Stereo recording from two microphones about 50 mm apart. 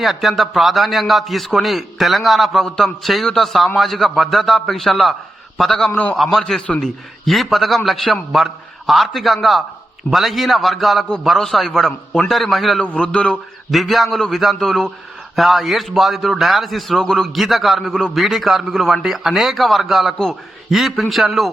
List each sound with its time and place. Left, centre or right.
0.0 s a man's voice: centre
6.7 s speech: centre
7.3 s a man's voice: centre
12.8 s a man's voice: left
13.7 s a man's voice: centre